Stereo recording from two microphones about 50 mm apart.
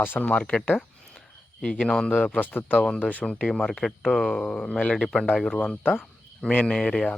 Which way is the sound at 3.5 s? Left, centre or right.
Centre.